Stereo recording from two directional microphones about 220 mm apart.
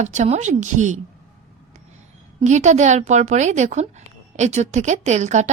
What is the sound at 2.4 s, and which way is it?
Speech, 30° right (ahead or behind).